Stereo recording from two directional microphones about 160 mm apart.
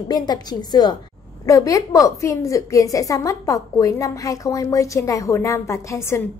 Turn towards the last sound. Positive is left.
turn(degrees=20)  # may be behind; listen again after turning